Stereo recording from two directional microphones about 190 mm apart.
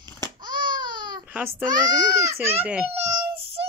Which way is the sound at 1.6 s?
20° right (ahead or behind).